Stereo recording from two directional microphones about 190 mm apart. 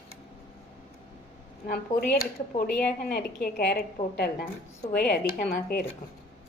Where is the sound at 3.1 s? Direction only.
55° left (ahead or behind).